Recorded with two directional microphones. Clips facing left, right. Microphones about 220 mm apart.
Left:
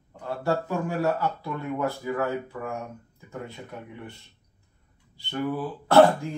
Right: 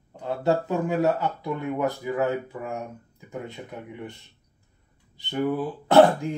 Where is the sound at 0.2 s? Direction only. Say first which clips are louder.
Right 3 dB; 20° right (ahead or behind).